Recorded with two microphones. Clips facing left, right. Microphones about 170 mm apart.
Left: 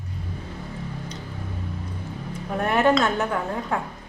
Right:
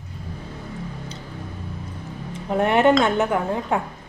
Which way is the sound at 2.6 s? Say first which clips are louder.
Right 3 dB; 25° right (ahead or behind).